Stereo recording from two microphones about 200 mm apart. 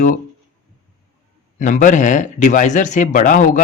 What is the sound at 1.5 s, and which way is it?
Speech, 40° left (ahead or behind).